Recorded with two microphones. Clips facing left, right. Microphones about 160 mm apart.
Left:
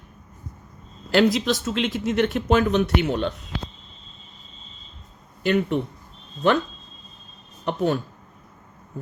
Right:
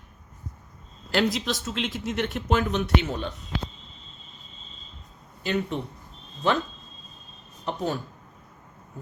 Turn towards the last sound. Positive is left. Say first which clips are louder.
# left 6 dB
turn(degrees=65)  # may be behind; listen again after turning